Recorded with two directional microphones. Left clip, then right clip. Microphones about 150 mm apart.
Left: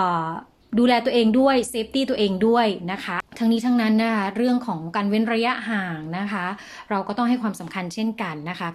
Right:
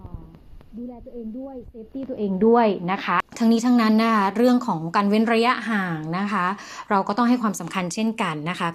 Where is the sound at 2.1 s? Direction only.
5° right (ahead or behind).